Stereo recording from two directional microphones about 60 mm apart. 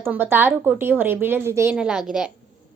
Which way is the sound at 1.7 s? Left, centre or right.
Centre.